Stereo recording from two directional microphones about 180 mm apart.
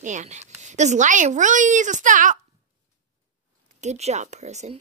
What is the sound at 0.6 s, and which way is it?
Speech, 40° right (ahead or behind).